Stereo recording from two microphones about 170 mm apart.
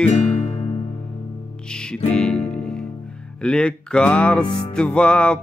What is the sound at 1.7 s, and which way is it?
Music, 5° left (ahead or behind).